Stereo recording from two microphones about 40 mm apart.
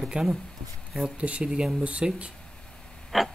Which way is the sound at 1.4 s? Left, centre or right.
Right.